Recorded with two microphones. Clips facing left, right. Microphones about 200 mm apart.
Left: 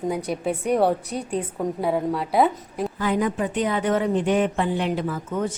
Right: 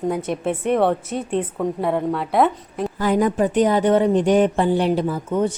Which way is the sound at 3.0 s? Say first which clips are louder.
Right 5 dB; 45° right (ahead or behind).